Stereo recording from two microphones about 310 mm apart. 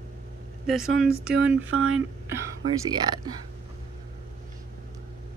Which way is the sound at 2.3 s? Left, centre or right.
Centre.